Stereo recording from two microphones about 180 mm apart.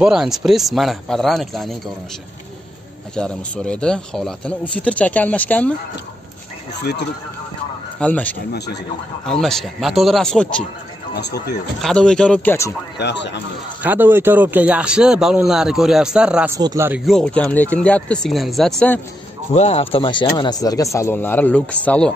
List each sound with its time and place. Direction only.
0.0 s speech: centre (ahead or behind)
3.2 s speech: 5° left (ahead or behind)
6.7 s speech: 70° left (ahead or behind)
8.0 s speech: 10° left (ahead or behind)
11.1 s speech: 65° left (ahead or behind)
11.8 s speech: 5° left (ahead or behind)
12.9 s speech: 75° left (ahead or behind)
13.8 s speech: 10° right (ahead or behind)
16.5 s speech: 20° right (ahead or behind)
17.0 s speech: 5° left (ahead or behind)
19.5 s speech: 35° left (ahead or behind); by 22.1 s 5° left (ahead or behind)